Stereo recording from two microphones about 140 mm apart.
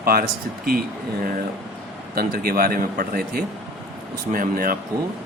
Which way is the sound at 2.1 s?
90° right.